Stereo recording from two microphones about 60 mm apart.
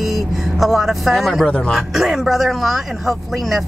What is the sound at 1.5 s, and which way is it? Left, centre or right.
Speech, centre.